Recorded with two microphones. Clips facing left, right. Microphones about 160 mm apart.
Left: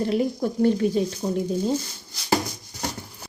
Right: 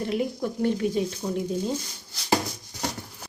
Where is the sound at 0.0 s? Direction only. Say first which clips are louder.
Left 4 dB; 35° left (ahead or behind).